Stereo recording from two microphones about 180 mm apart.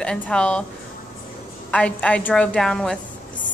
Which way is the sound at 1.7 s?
5° left (ahead or behind).